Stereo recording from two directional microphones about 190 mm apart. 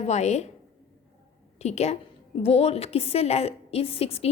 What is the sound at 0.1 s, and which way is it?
Speech, 35° left (ahead or behind).